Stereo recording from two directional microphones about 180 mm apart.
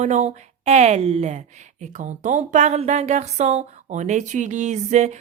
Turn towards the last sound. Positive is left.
turn(degrees=-40)  # may be behind; listen again after turning